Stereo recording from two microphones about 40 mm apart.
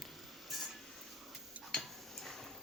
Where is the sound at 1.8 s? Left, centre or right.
Centre.